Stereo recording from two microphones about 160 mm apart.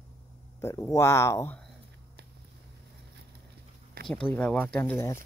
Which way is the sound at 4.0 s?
70° right (ahead or behind).